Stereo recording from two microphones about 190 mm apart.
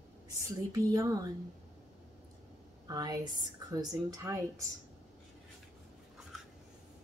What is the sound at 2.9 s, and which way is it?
A woman's voice, 20° right (ahead or behind).